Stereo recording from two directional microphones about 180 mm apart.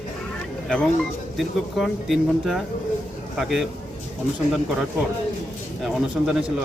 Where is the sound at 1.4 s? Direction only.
Centre (ahead or behind).